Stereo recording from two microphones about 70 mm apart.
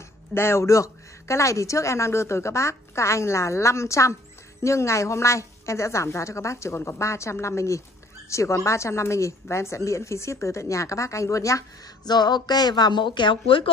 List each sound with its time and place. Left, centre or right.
0.3 s speech: left
12.1 s speech: left